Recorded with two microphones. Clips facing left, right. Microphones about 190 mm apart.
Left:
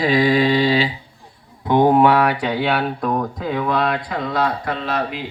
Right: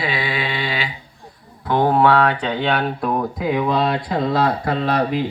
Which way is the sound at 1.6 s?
15° left (ahead or behind).